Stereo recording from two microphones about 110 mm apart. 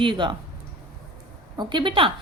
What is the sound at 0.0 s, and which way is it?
Speech, 45° right (ahead or behind).